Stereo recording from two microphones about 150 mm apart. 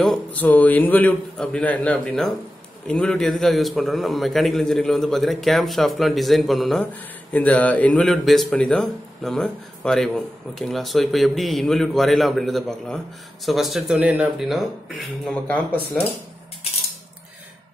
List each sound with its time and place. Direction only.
0.0 s a man's voice: 5° left (ahead or behind)